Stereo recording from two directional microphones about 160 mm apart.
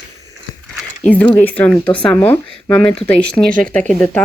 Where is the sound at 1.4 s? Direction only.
10° left (ahead or behind).